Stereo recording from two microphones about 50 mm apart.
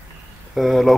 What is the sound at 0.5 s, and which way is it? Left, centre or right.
Speech, centre.